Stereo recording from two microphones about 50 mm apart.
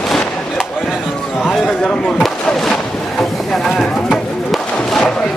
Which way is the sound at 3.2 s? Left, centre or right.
Centre.